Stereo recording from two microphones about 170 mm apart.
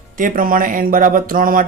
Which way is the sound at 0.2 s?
55° right (ahead or behind).